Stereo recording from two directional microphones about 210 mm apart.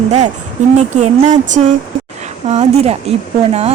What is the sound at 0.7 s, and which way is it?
Speech, 35° right (ahead or behind).